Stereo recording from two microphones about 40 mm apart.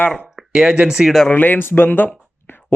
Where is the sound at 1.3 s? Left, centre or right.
Left.